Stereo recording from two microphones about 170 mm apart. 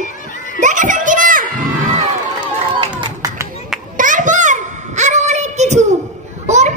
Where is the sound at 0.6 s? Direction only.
50° right (ahead or behind).